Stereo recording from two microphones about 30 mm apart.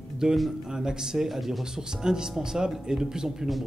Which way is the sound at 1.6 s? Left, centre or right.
Right.